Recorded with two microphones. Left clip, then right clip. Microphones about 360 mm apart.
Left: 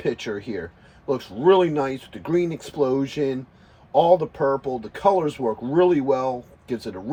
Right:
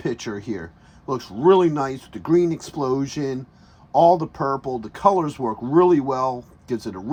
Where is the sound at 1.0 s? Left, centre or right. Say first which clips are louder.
Right 1 dB; right.